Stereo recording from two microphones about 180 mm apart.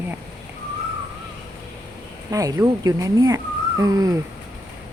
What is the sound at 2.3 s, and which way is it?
Speech, 20° right (ahead or behind).